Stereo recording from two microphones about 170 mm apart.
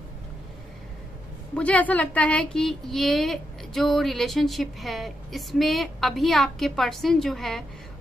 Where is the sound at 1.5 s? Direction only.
10° left (ahead or behind).